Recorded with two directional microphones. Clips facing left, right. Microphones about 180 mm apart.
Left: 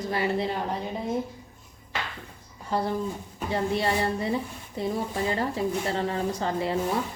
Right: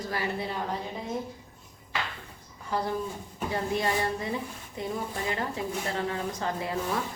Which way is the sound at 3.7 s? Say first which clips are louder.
Left 1 dB; 30° left (ahead or behind).